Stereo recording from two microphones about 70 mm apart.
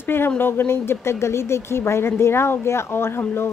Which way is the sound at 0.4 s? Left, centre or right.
Left.